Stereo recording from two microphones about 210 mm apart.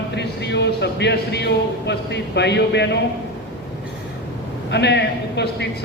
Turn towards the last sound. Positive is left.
turn(degrees=55)  # may be behind; listen again after turning